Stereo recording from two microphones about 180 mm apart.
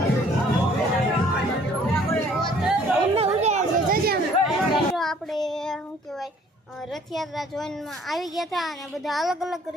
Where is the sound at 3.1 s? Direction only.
35° right (ahead or behind).